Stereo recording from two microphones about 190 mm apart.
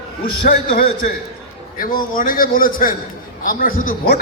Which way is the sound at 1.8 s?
45° left (ahead or behind).